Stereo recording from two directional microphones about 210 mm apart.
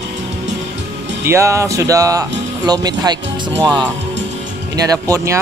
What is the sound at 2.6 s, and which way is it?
Speech, 20° right (ahead or behind).